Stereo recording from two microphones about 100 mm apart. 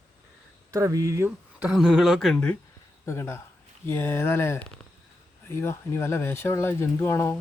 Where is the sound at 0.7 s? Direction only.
35° right (ahead or behind).